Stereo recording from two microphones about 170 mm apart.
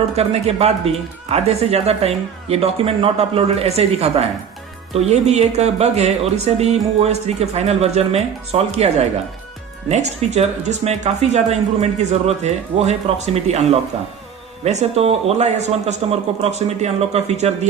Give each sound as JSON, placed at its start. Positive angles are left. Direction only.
{"t": 0.2, "sound": "speech", "side_deg": -35}